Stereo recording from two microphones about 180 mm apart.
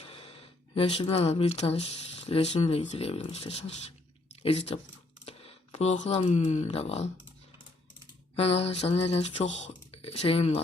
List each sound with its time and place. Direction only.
0.0 s speech: 30° left (ahead or behind)
5.2 s a sound: 35° left (ahead or behind)
6.1 s speech: 35° left (ahead or behind)
8.4 s speech: 35° left (ahead or behind)